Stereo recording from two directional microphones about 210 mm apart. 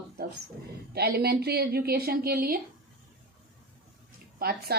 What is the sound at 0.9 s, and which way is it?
A woman's voice, 50° right (ahead or behind).